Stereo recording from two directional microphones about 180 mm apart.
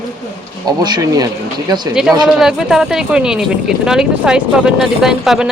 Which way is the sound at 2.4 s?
Centre (ahead or behind).